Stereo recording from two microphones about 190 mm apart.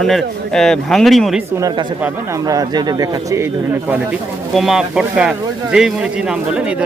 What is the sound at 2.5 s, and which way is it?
Speech, 20° right (ahead or behind).